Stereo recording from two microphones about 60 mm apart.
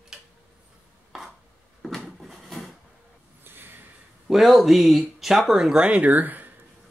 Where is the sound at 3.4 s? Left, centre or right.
Right.